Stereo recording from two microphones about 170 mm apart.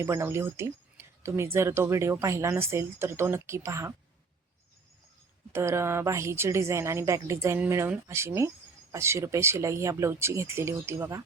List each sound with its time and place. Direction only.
0.0 s a woman's voice: 15° right (ahead or behind)
5.5 s a woman's voice: 15° right (ahead or behind)